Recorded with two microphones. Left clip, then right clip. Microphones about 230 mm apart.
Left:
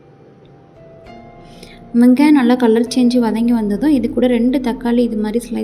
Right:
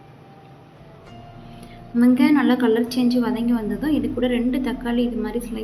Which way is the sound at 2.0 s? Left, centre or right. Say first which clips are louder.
Left 6 dB; left.